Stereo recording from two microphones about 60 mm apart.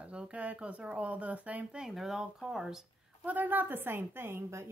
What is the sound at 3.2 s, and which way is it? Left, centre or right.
A woman's voice, right.